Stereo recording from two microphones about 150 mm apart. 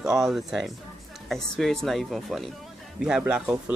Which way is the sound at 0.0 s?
5° right (ahead or behind).